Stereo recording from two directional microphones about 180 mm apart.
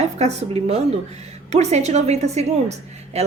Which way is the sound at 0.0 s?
35° right (ahead or behind).